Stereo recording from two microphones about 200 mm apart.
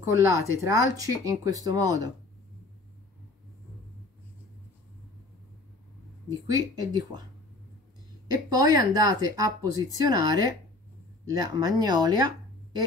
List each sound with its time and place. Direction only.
0.0 s speech: 15° right (ahead or behind)
6.5 s speech: 20° right (ahead or behind)
8.5 s speech: 20° right (ahead or behind)